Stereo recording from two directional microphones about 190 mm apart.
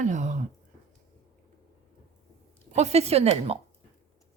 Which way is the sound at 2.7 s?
35° right (ahead or behind).